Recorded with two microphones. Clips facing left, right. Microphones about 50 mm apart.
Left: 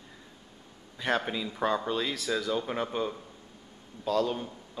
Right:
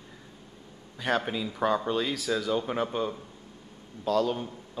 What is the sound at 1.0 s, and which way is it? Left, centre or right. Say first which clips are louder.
Speech: right 1 dB; centre.